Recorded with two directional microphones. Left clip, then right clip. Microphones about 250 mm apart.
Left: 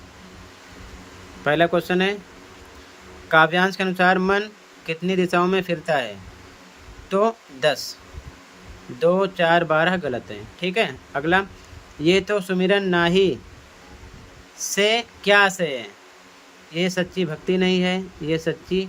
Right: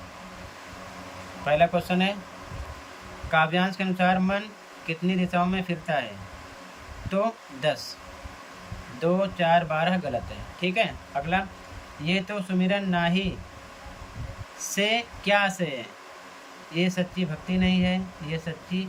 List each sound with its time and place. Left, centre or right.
1.5 s speech: centre
3.2 s speech: left
7.1 s speech: centre
9.0 s speech: left
14.7 s speech: centre